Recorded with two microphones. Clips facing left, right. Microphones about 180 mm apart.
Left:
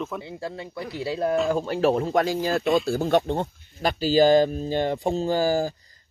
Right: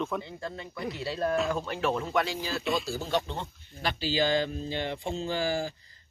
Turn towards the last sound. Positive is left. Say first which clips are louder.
# left 7 dB
turn(degrees=40)  # may be behind; listen again after turning